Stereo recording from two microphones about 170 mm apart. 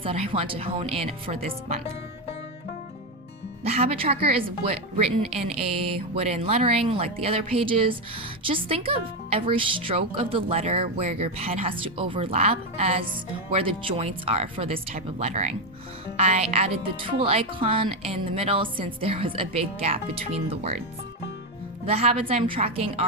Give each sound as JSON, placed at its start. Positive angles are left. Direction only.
{"t": 0.0, "sound": "a woman's voice", "side_deg": -35}
{"t": 3.6, "sound": "a woman's voice", "side_deg": -35}
{"t": 21.8, "sound": "a woman's voice", "side_deg": -35}